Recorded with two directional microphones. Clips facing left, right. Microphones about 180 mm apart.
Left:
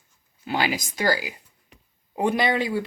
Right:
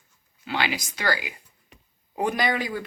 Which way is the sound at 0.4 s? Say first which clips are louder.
Left 3 dB; 40° left (ahead or behind).